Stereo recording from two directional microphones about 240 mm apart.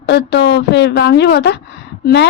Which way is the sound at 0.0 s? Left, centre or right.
Left.